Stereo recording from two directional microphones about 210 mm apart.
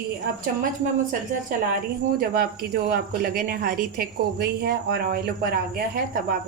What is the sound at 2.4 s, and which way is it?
Speech, 45° right (ahead or behind).